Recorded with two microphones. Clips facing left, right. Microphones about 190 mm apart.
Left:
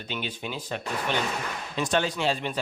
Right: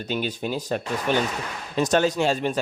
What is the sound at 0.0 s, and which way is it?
A man's voice, 40° right (ahead or behind).